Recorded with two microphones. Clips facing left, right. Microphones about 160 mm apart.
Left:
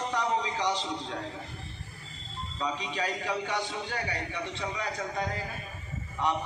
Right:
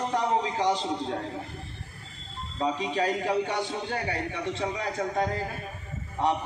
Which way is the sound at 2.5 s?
50° right (ahead or behind).